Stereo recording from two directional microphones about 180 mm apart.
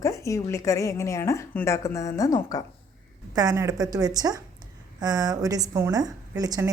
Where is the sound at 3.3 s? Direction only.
20° right (ahead or behind).